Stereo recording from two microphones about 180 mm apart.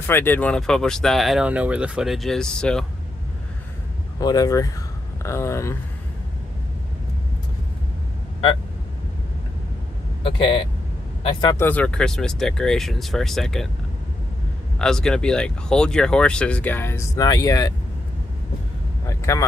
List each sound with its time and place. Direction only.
0.0 s speech: 10° left (ahead or behind)
4.2 s speech: 20° left (ahead or behind)
10.2 s speech: 30° left (ahead or behind)
11.5 s speech: 10° left (ahead or behind)
14.8 s speech: 5° left (ahead or behind)
19.0 s speech: 15° left (ahead or behind)